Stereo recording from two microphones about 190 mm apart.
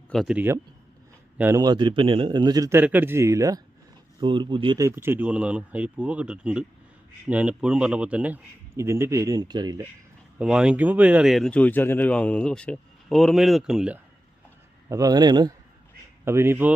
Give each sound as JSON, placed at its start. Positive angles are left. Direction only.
{"t": 0.1, "sound": "a man's voice", "side_deg": 0}
{"t": 10.3, "sound": "speech", "side_deg": -5}
{"t": 14.8, "sound": "a man's voice", "side_deg": -20}